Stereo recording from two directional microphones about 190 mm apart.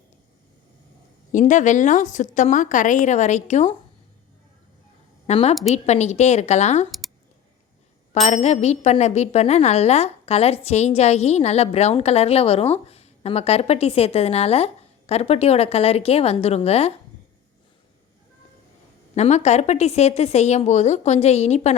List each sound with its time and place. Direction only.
1.3 s speech: 40° left (ahead or behind)
5.2 s a woman's voice: 35° left (ahead or behind)
8.1 s speech: 35° left (ahead or behind)
19.1 s speech: 35° left (ahead or behind)